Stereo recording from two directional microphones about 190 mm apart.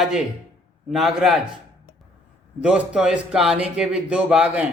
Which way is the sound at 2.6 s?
5° right (ahead or behind).